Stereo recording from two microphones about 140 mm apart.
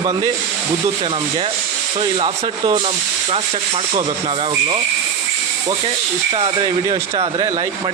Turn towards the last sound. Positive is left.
turn(degrees=-35)  # may be behind; listen again after turning